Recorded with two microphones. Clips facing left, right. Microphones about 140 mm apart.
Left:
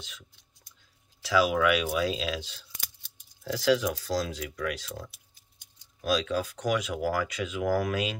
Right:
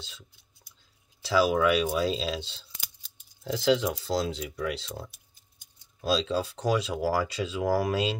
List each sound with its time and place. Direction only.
1.2 s speech: 30° right (ahead or behind)
5.9 s speech: 30° right (ahead or behind)